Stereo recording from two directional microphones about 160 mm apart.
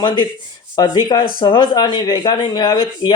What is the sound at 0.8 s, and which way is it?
Speech, 25° left (ahead or behind).